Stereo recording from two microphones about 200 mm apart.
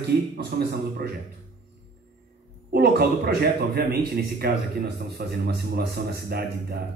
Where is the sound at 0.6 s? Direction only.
50° right (ahead or behind).